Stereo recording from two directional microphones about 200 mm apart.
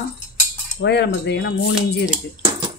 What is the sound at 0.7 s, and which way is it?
Cutlery, 60° left (ahead or behind).